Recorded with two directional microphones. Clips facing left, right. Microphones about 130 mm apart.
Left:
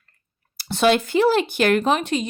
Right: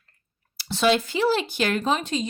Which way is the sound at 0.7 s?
55° left (ahead or behind).